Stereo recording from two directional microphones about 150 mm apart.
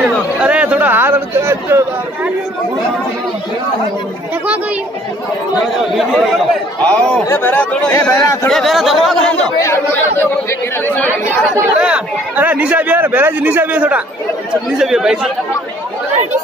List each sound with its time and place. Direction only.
0.0 s a sound: 10° right (ahead or behind)
5.9 s speech: centre (ahead or behind); by 8.5 s 20° left (ahead or behind)
8.5 s speech: centre (ahead or behind)
9.6 s speech: 20° left (ahead or behind)
11.8 s a man's voice: 10° right (ahead or behind)